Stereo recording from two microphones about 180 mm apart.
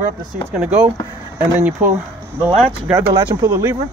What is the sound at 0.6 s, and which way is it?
Speech, 5° right (ahead or behind).